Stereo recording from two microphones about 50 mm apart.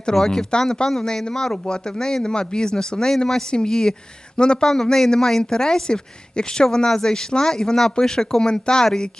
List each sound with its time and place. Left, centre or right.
0.0 s speech: centre